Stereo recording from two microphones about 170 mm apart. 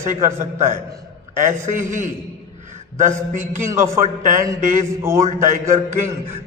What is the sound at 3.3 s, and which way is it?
Speech, 50° right (ahead or behind).